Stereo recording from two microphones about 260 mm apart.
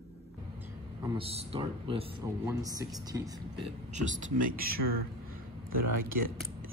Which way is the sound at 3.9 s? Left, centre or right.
Right.